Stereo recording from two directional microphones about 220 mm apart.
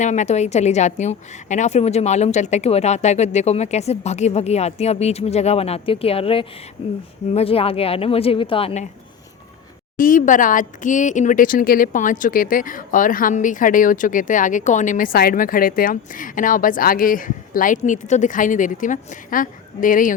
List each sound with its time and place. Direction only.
0.0 s speech: 35° left (ahead or behind)
10.0 s speech: 35° left (ahead or behind)